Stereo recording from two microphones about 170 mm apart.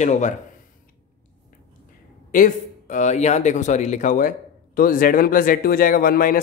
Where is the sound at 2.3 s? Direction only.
50° left (ahead or behind).